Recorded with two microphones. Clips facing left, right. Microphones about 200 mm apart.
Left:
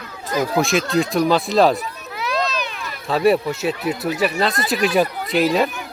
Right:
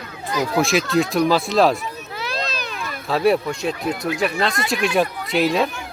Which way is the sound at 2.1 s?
30° right (ahead or behind).